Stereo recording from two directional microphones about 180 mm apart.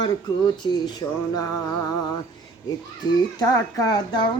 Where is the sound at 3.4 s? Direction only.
20° left (ahead or behind).